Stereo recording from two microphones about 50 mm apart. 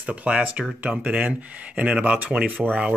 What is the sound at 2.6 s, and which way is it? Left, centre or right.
Speech, centre.